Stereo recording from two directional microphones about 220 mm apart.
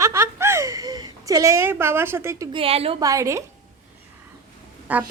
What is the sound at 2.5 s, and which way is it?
Speech, 25° right (ahead or behind).